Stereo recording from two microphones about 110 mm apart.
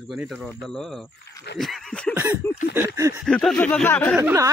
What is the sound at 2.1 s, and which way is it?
Speech, 15° right (ahead or behind).